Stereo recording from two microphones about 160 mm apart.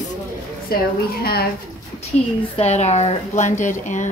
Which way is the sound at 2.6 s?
45° left (ahead or behind).